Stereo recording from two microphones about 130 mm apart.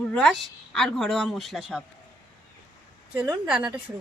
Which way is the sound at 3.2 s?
5° right (ahead or behind).